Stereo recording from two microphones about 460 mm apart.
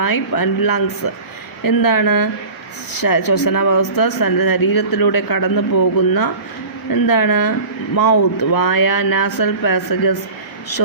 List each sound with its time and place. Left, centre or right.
0.0 s a man's voice: left